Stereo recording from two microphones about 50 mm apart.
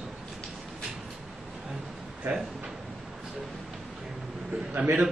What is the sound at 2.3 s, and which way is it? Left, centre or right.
Speech, right.